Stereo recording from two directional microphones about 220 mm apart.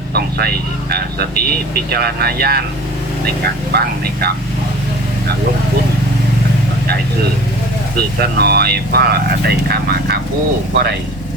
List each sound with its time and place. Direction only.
0.1 s speech: 45° right (ahead or behind)
3.7 s speech: 45° right (ahead or behind)
7.9 s speech: 45° right (ahead or behind)